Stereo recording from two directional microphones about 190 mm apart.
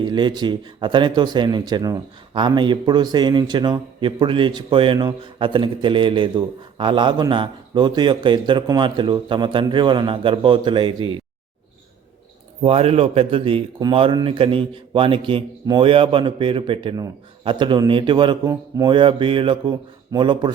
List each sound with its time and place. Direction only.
0.0 s speech: 25° right (ahead or behind)
12.6 s speech: 30° right (ahead or behind)